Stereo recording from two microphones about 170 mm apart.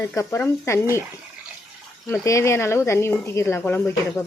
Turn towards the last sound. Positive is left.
turn(degrees=10)  # may be behind; listen again after turning